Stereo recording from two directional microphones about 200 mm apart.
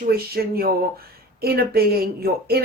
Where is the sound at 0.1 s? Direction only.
50° right (ahead or behind).